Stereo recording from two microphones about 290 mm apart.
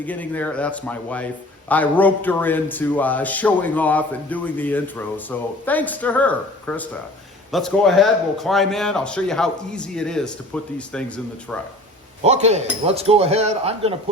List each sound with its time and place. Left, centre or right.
0.0 s a man's voice: centre
12.2 s speech: right